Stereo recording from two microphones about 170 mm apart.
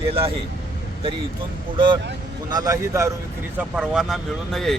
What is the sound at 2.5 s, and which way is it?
Speech, 20° right (ahead or behind).